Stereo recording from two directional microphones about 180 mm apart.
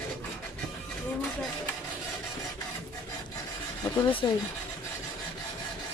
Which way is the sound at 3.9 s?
25° left (ahead or behind).